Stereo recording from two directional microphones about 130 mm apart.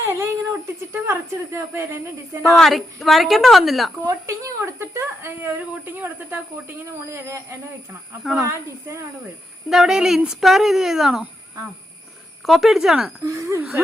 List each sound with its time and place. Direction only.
0.0 s a sound: 20° right (ahead or behind)
1.0 s speech: 25° right (ahead or behind)
2.5 s speech: centre (ahead or behind)
4.0 s speech: 25° right (ahead or behind)
9.6 s speech: 5° right (ahead or behind)
12.5 s speech: centre (ahead or behind)
13.2 s speech: 20° right (ahead or behind)